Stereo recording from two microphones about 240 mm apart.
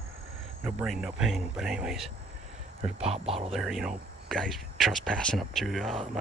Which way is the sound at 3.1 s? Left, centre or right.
Right.